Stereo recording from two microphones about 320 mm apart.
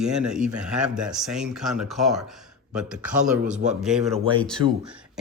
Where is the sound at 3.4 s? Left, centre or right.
Right.